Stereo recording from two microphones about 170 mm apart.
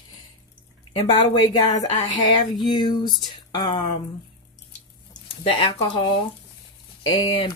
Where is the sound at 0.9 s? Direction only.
25° left (ahead or behind).